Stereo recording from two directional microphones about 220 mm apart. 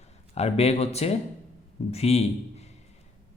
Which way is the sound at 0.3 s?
30° left (ahead or behind).